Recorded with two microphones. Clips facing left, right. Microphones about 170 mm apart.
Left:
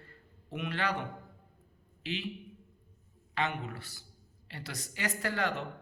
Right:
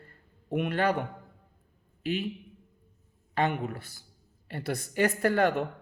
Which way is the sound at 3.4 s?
50° right (ahead or behind).